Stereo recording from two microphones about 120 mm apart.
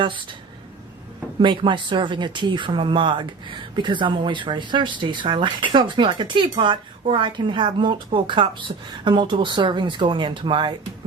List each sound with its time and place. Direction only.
1.4 s speech: 40° right (ahead or behind)